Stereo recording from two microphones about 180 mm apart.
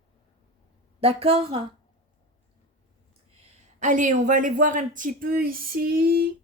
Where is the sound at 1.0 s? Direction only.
30° right (ahead or behind).